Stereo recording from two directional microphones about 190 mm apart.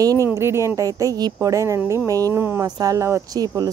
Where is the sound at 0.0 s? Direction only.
15° right (ahead or behind).